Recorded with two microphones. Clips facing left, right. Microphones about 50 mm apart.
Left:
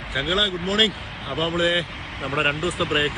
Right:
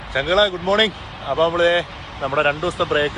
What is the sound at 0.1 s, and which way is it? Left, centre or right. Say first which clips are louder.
Speech: right 6 dB; centre.